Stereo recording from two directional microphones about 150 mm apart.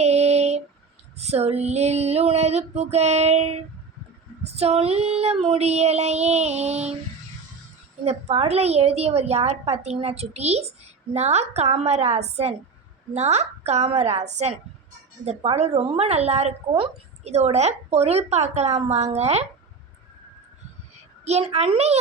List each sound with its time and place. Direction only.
0.0 s a sound: 45° right (ahead or behind)
1.2 s a woman's voice: 45° right (ahead or behind)
8.0 s a woman's voice: 45° right (ahead or behind)
21.2 s a woman's voice: 45° right (ahead or behind)